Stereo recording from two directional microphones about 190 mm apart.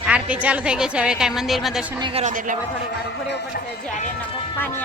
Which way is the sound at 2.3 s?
45° right (ahead or behind).